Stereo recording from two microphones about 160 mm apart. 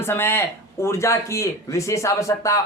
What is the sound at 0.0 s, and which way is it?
A man's voice, 15° left (ahead or behind).